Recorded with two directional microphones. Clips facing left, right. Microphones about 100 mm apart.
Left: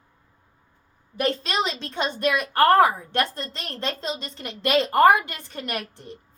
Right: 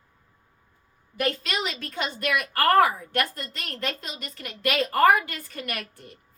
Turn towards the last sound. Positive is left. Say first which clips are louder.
# left 4 dB
turn(degrees=25)  # may be behind; listen again after turning